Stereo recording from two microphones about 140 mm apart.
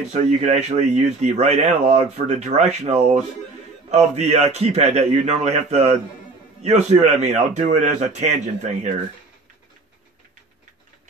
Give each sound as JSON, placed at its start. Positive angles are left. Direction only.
{"t": 0.1, "sound": "a man's voice", "side_deg": -55}